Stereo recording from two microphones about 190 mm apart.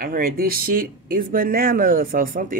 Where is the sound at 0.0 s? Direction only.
50° right (ahead or behind).